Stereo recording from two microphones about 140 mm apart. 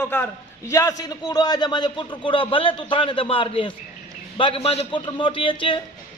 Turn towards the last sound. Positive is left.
turn(degrees=40)  # may be behind; listen again after turning